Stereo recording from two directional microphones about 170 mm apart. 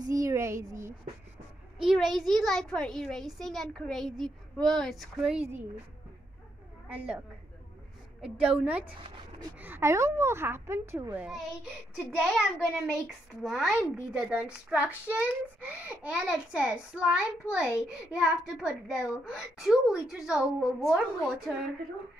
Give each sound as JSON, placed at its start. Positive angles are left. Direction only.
{"t": 0.0, "sound": "a sound", "side_deg": -20}
{"t": 1.8, "sound": "a child's voice", "side_deg": 0}
{"t": 6.9, "sound": "a child's voice", "side_deg": -10}